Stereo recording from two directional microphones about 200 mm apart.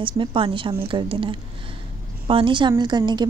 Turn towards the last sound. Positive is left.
turn(degrees=-20)  # may be behind; listen again after turning